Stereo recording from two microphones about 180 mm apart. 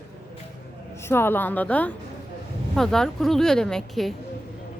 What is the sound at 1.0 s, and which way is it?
A woman's voice, 15° left (ahead or behind).